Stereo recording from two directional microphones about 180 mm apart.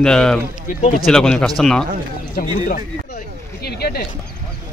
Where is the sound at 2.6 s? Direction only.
45° left (ahead or behind).